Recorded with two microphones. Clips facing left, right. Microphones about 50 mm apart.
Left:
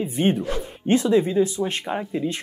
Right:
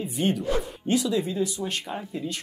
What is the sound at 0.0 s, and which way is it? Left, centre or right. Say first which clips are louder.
Speech: left 4 dB; left.